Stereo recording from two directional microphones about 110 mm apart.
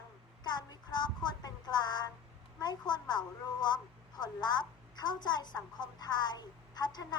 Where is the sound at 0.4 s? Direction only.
40° left (ahead or behind).